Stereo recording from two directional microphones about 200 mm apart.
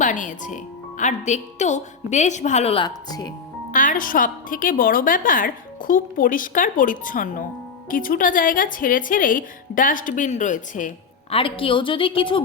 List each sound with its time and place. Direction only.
0.0 s speech: 40° left (ahead or behind); by 3.3 s 20° left (ahead or behind)
3.7 s a woman's voice: 40° left (ahead or behind)
11.3 s a woman's voice: 25° left (ahead or behind)